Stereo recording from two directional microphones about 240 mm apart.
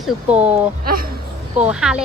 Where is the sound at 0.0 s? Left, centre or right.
Centre.